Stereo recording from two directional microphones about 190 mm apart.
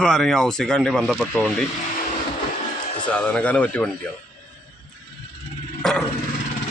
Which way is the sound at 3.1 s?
5° left (ahead or behind).